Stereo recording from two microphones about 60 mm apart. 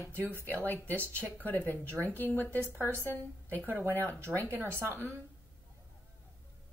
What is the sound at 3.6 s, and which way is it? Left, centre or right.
Speech, right.